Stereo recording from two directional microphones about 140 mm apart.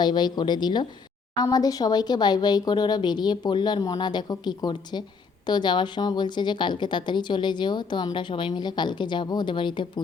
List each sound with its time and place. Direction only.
0.0 s a woman's voice: 30° left (ahead or behind)